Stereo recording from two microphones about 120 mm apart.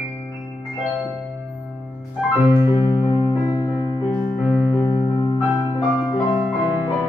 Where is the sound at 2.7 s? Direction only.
30° left (ahead or behind).